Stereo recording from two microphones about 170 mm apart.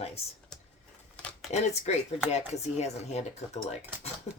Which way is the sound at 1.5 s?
40° left (ahead or behind).